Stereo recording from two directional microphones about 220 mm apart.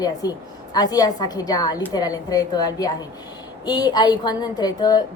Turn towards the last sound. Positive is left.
turn(degrees=20)  # may be behind; listen again after turning